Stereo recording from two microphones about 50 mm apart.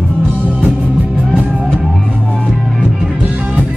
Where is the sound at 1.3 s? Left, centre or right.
Right.